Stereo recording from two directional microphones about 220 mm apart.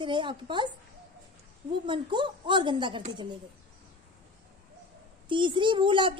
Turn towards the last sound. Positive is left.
turn(degrees=-20)  # may be behind; listen again after turning